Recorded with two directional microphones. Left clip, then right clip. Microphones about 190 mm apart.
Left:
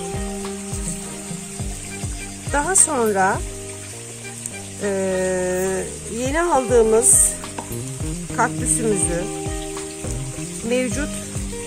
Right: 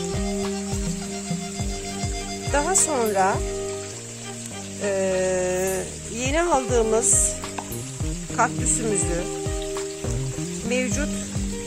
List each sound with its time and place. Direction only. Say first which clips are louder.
2.5 s speech: left 2 dB; 25° right (ahead or behind)
4.8 s a sound: left 1 dB; 35° right (ahead or behind)
8.4 s speech: left 2 dB; 30° right (ahead or behind)
10.7 s speech: left 4 dB; 25° right (ahead or behind)